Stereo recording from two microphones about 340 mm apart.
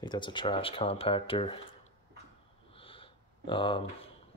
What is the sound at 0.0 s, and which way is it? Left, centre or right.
Speech, centre.